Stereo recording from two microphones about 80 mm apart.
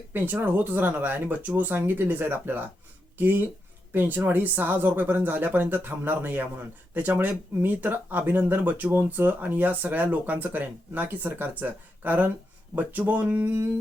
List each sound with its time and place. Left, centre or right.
0.1 s speech: right